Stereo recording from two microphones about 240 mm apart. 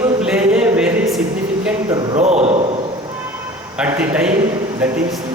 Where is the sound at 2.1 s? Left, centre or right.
Right.